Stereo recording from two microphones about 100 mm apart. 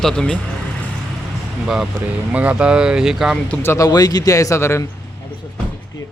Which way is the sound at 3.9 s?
40° left (ahead or behind).